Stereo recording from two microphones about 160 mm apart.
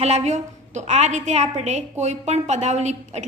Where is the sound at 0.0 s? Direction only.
45° right (ahead or behind).